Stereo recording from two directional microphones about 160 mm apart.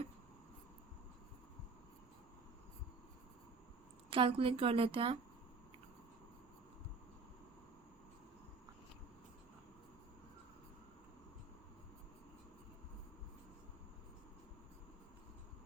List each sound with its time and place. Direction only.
4.1 s a woman's voice: 35° right (ahead or behind)